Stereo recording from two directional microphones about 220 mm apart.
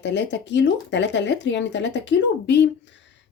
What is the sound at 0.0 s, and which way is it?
Speech, 55° left (ahead or behind).